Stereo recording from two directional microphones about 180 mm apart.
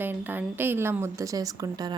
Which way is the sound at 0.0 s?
10° right (ahead or behind).